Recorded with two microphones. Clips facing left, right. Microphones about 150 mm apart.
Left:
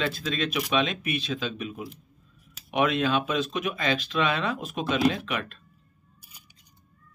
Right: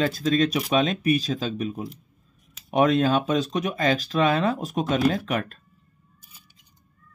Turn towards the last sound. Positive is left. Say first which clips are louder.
# right 5 dB
turn(degrees=-45)  # may be behind; listen again after turning